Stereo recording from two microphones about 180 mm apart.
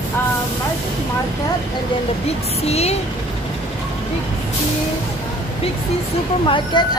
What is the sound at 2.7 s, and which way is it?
Speech, 35° left (ahead or behind).